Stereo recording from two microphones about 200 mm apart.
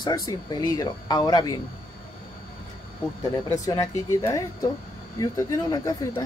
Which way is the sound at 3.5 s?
15° left (ahead or behind).